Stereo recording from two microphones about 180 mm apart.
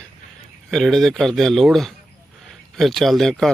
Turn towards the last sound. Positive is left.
turn(degrees=0)  # may be behind; listen again after turning